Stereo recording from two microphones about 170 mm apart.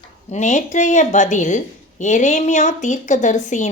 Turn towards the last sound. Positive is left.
turn(degrees=45)  # may be behind; listen again after turning